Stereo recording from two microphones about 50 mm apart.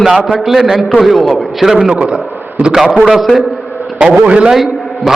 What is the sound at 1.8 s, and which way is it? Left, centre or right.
A man's voice, right.